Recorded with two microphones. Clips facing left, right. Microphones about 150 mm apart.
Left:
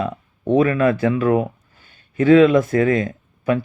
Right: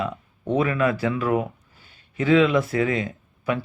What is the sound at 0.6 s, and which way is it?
Speech, 45° left (ahead or behind).